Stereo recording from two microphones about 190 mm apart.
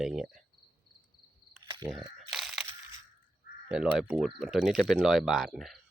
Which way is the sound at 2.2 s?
Centre (ahead or behind).